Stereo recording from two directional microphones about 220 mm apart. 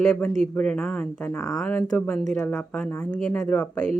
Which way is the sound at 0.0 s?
5° left (ahead or behind).